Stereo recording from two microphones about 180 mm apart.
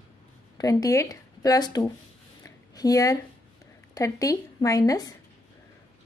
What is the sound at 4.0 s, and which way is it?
A woman's voice, 20° left (ahead or behind).